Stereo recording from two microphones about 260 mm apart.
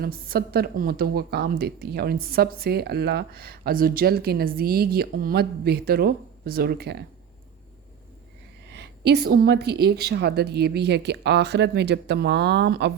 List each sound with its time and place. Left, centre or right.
0.0 s a woman's voice: right
8.7 s a woman's voice: right